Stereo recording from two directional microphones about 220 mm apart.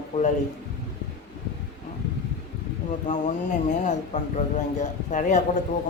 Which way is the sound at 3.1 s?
35° left (ahead or behind).